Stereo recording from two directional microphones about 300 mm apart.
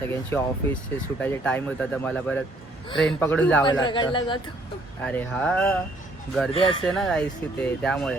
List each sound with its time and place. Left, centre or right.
0.0 s a man's voice: centre
5.0 s speech: centre
6.5 s a man's voice: centre
6.8 s speech: centre